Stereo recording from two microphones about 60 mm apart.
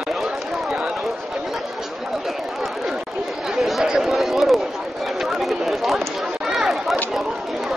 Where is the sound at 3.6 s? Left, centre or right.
Centre.